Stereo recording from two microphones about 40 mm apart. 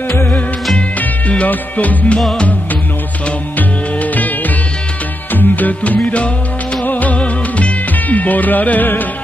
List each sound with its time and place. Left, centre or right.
1.5 s music: left
2.1 s music: centre
3.5 s music: left
5.3 s music: left